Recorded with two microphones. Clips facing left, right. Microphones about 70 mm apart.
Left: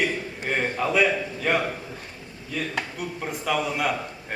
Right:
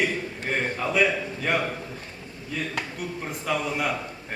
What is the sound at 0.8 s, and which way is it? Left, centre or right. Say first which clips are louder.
Speech: left 2 dB; centre.